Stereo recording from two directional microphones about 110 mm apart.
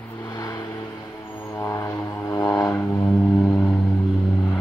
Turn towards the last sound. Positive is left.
turn(degrees=5)  # may be behind; listen again after turning